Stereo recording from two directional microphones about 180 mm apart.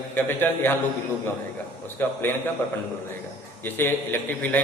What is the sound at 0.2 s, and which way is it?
Speech, 10° left (ahead or behind).